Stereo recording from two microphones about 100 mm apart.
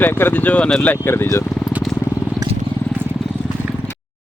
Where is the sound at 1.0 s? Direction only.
25° left (ahead or behind).